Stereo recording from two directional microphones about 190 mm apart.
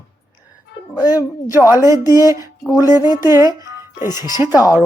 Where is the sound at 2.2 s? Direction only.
20° left (ahead or behind).